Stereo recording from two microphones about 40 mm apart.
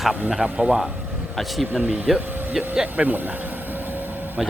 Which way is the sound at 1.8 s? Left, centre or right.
Centre.